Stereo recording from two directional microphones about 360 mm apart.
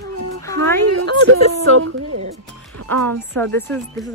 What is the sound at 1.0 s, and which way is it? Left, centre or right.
Speech, right.